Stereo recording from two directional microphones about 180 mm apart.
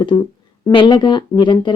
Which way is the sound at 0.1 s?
30° left (ahead or behind).